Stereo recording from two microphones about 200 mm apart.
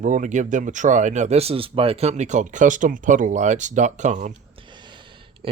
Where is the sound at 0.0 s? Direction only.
40° right (ahead or behind).